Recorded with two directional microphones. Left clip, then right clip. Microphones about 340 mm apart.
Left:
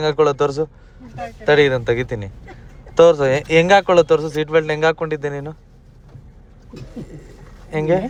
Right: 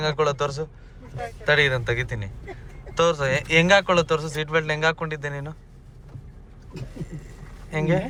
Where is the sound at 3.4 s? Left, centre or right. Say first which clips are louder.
Left 4 dB; centre.